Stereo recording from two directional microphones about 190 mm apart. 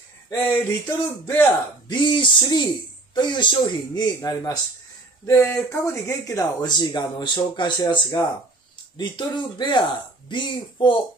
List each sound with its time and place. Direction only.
0.3 s speech: 10° left (ahead or behind)
1.9 s speech: 25° left (ahead or behind)